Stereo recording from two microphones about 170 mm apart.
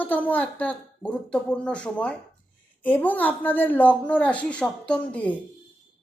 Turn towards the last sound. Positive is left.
turn(degrees=10)  # may be behind; listen again after turning